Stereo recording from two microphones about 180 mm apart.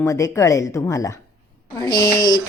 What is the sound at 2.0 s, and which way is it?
Speech, 55° left (ahead or behind).